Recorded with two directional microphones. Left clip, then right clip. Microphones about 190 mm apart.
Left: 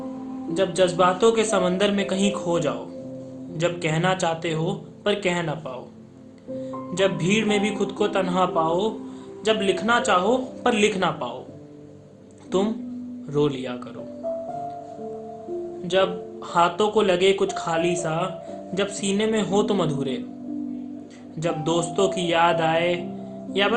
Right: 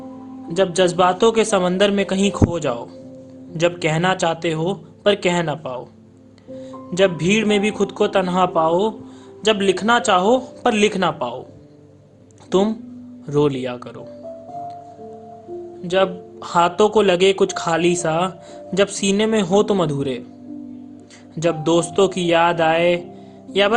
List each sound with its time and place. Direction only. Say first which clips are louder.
0.5 s speech: right 4 dB; 60° right (ahead or behind)
6.9 s speech: right 5 dB; 60° right (ahead or behind)
12.5 s speech: right 5 dB; 60° right (ahead or behind)
15.9 s speech: right 3 dB; 60° right (ahead or behind)
21.3 s speech: right 6 dB; 60° right (ahead or behind)